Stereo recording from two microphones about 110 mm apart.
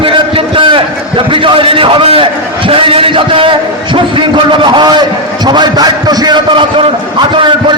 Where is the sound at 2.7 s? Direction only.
55° right (ahead or behind).